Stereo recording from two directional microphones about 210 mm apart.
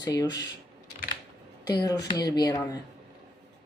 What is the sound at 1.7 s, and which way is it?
Speech, 20° left (ahead or behind).